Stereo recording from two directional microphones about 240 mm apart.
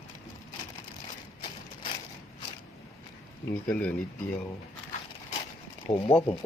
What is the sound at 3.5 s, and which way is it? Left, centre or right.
Speech, centre.